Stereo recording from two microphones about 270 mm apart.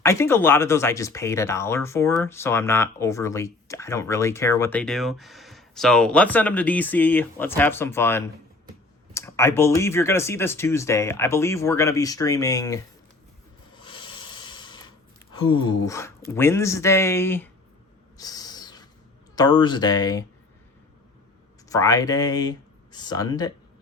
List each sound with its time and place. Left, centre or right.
0.0 s speech: centre
13.7 s rub: centre
15.6 s speech: centre
18.2 s owl: centre
19.4 s speech: centre
21.7 s speech: centre